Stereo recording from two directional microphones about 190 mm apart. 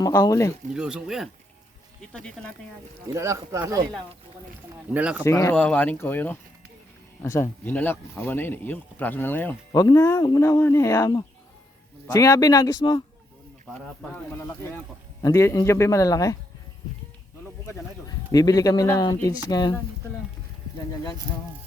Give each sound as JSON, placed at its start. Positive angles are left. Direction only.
{"t": 0.0, "sound": "speech", "side_deg": 20}
{"t": 0.7, "sound": "speech", "side_deg": -5}
{"t": 3.2, "sound": "speech", "side_deg": -15}
{"t": 4.9, "sound": "speech", "side_deg": -5}
{"t": 5.2, "sound": "speech", "side_deg": 15}
{"t": 14.1, "sound": "speech", "side_deg": 10}
{"t": 18.3, "sound": "speech", "side_deg": 20}